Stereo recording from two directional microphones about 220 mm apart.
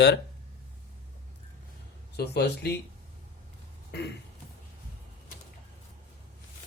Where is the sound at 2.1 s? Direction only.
45° left (ahead or behind).